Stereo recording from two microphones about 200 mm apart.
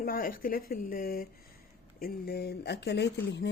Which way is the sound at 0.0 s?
45° left (ahead or behind).